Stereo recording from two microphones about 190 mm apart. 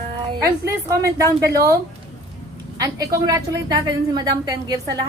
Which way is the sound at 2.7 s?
20° right (ahead or behind).